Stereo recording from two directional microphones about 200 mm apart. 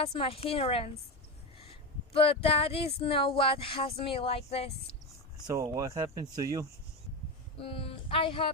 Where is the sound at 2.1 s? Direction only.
30° left (ahead or behind).